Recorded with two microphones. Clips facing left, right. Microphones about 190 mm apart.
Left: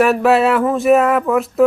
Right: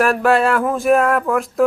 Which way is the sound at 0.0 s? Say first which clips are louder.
Left 2 dB; centre (ahead or behind).